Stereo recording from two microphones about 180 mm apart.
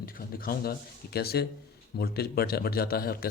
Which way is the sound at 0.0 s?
55° left (ahead or behind).